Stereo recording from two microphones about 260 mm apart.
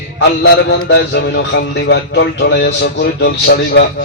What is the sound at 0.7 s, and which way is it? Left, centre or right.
Speech, left.